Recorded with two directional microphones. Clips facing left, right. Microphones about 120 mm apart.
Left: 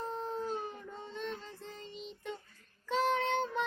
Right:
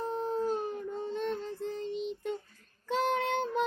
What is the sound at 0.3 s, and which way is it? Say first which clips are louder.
Child singing: right 6 dB; 50° right (ahead or behind).